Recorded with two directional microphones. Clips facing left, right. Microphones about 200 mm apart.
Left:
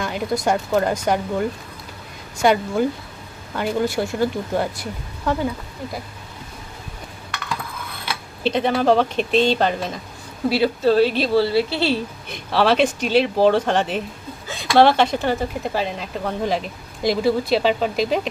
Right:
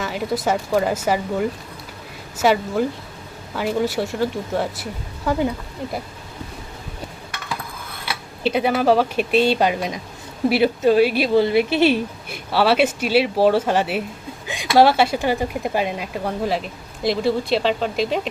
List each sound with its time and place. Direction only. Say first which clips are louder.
0.0 s speech: even; centre (ahead or behind)
8.0 s speech: even; 10° right (ahead or behind)
14.4 s a sound: right 2 dB; 15° right (ahead or behind)
14.7 s speech: even; 5° right (ahead or behind)